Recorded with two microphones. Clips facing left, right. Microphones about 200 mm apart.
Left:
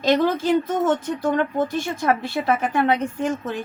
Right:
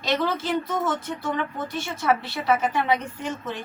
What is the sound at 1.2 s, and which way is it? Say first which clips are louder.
A woman's voice: left 9 dB; 45° left (ahead or behind).